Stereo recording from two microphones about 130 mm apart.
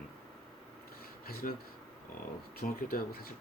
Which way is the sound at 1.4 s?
90° left.